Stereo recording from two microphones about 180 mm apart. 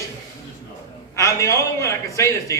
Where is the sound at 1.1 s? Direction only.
15° left (ahead or behind).